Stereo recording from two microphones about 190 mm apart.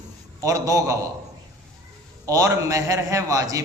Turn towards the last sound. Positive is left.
turn(degrees=-15)  # may be behind; listen again after turning